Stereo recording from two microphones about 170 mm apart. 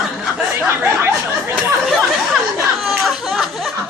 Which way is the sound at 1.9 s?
Centre (ahead or behind).